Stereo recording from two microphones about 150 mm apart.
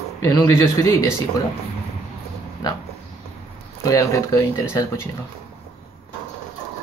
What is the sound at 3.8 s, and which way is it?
Speech, 20° left (ahead or behind).